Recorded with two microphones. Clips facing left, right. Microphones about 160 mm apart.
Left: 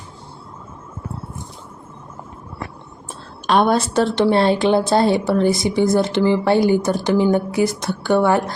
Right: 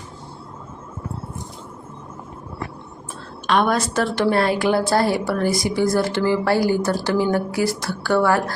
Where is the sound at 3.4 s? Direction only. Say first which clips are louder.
Left 3 dB; 35° left (ahead or behind).